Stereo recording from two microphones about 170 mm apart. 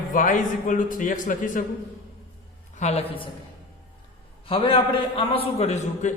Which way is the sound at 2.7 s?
40° left (ahead or behind).